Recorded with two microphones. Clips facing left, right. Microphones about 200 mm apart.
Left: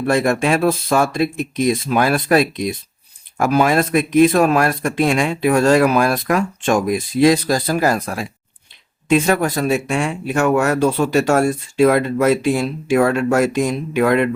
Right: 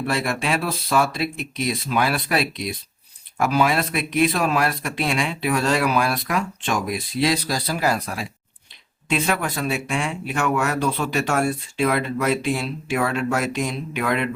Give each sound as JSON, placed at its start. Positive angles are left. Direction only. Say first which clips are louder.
{"t": 0.1, "sound": "speech", "louder": "left 9 dB", "side_deg": 45}